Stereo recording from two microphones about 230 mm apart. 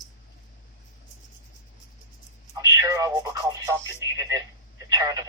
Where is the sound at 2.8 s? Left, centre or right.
Centre.